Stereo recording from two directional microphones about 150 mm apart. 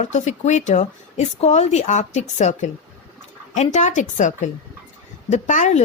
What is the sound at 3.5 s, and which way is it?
Speech, 50° left (ahead or behind).